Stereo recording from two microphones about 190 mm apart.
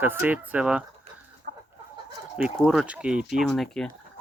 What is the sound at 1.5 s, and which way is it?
Chicken, 50° right (ahead or behind).